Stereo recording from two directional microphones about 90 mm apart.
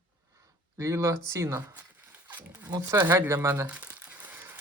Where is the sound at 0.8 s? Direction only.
35° right (ahead or behind).